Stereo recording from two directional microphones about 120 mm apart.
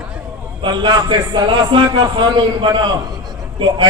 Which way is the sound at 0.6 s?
40° right (ahead or behind).